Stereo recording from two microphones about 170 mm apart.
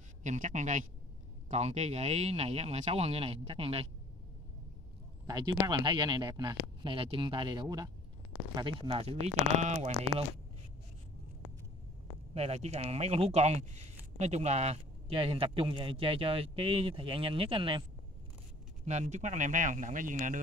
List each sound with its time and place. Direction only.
0.2 s a man's voice: 45° right (ahead or behind)
5.2 s speech: 25° right (ahead or behind); by 10.2 s 40° right (ahead or behind)
12.4 s speech: 40° right (ahead or behind)
18.9 s a man's voice: 40° right (ahead or behind)